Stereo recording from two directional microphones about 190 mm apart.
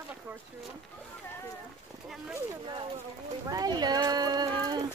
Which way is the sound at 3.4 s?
20° right (ahead or behind).